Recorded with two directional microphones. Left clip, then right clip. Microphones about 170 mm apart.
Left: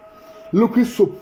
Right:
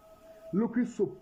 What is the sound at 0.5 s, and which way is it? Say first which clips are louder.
Speech: left 14 dB; 35° left (ahead or behind).